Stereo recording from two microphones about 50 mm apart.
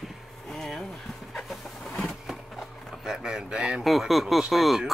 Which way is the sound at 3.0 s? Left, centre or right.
Centre.